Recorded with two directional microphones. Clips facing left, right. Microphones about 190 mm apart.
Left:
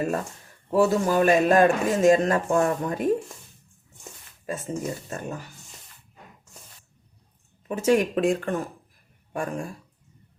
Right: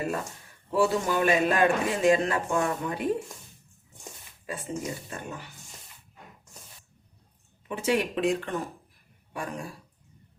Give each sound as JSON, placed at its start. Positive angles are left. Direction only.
{"t": 0.7, "sound": "a man's voice", "side_deg": 40}
{"t": 4.4, "sound": "a man's voice", "side_deg": 45}
{"t": 7.7, "sound": "a man's voice", "side_deg": 45}